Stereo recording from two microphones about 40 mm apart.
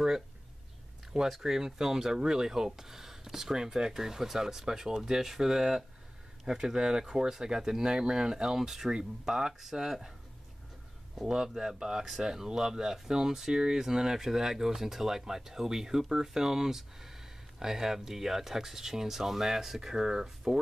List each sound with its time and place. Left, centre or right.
1.3 s speech: centre
9.5 s speech: centre
11.1 s speech: centre